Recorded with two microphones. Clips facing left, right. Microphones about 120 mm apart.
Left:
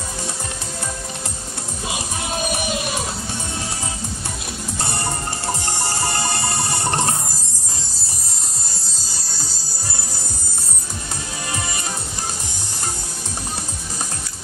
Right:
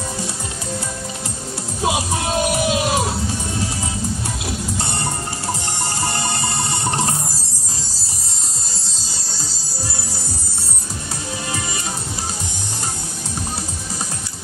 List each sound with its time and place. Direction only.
1.8 s music: 90° right